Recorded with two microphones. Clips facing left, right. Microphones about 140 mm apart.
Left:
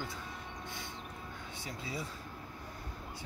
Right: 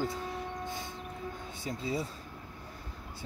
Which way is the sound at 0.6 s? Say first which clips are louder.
Right 6 dB; 45° right (ahead or behind).